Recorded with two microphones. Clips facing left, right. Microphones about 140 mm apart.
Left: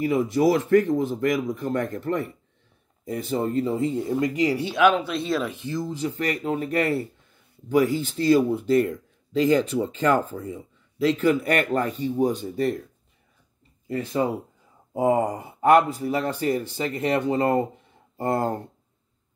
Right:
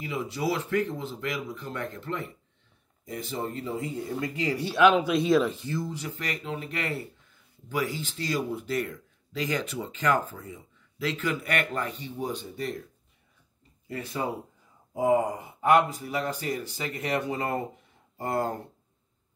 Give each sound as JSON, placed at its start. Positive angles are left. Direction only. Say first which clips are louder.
{"t": 0.0, "sound": "speech", "louder": "left 10 dB", "side_deg": 50}
{"t": 3.1, "sound": "speech", "louder": "left 7 dB", "side_deg": 35}
{"t": 4.9, "sound": "speech", "louder": "right 3 dB", "side_deg": -5}
{"t": 5.9, "sound": "speech", "louder": "left 8 dB", "side_deg": 30}
{"t": 13.8, "sound": "speech", "louder": "left 8 dB", "side_deg": 25}
{"t": 15.0, "sound": "speech", "louder": "left 2 dB", "side_deg": 35}